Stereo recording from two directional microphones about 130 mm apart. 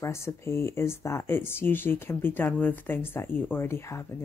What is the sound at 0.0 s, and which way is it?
A woman's voice, 20° left (ahead or behind).